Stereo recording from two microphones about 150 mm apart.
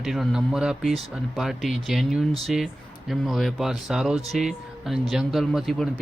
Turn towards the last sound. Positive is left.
turn(degrees=0)  # may be behind; listen again after turning